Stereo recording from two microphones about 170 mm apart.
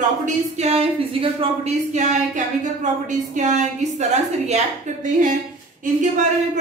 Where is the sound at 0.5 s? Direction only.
35° right (ahead or behind).